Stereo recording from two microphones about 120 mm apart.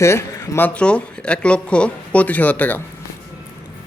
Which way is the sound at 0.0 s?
25° left (ahead or behind).